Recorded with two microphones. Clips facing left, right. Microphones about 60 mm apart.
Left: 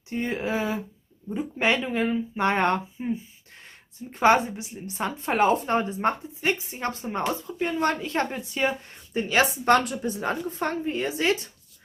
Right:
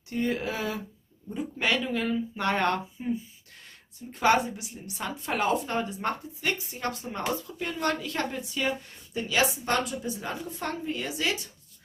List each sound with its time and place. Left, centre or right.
0.1 s a woman's voice: left